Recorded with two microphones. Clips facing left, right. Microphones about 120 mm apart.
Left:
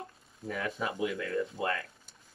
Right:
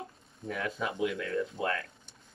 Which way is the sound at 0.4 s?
5° left (ahead or behind).